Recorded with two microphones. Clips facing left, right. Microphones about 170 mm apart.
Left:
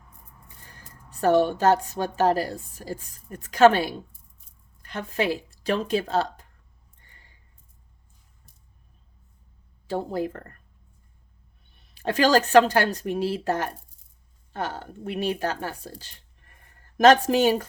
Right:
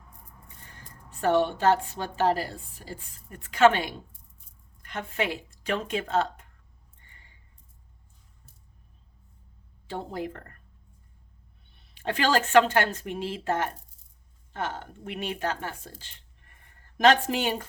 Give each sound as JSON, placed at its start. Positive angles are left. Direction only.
{"t": 1.1, "sound": "a woman's voice", "side_deg": 40}
{"t": 10.1, "sound": "a woman's voice", "side_deg": 40}
{"t": 11.9, "sound": "a woman's voice", "side_deg": 40}